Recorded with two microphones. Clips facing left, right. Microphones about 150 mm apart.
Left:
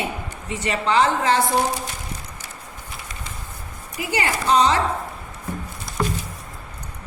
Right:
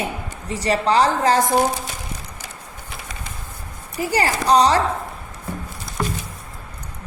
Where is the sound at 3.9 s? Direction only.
40° right (ahead or behind).